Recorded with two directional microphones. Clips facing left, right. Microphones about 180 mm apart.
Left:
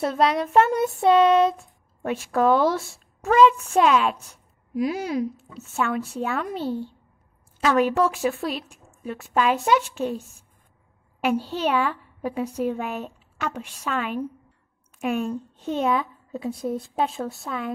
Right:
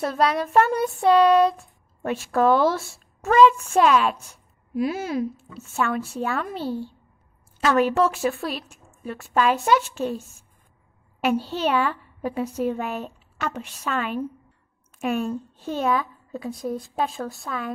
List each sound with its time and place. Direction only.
0.0 s a woman's voice: 20° left (ahead or behind)
11.2 s a woman's voice: 15° left (ahead or behind)